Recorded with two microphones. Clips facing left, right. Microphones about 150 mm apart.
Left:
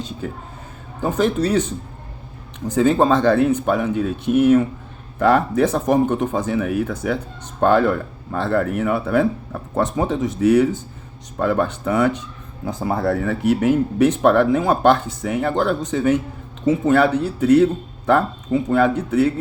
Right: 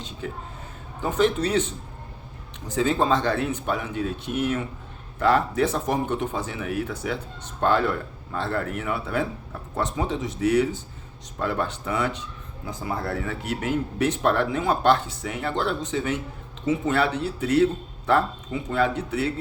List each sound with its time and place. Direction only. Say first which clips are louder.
1.0 s speech: left 3 dB; 40° left (ahead or behind)
2.6 s speech: left 6 dB; 50° left (ahead or behind)